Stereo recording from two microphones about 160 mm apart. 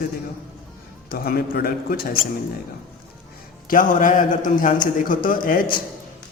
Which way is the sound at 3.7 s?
55° left (ahead or behind).